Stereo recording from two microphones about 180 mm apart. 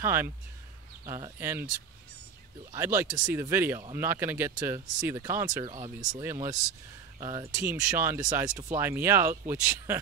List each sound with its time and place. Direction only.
0.0 s speech: 15° right (ahead or behind)
2.7 s speech: 15° right (ahead or behind)